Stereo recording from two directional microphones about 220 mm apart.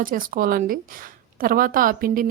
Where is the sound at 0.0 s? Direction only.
40° right (ahead or behind).